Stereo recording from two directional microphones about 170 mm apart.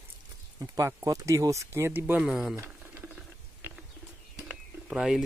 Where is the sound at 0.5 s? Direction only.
20° right (ahead or behind); by 2.5 s 5° right (ahead or behind).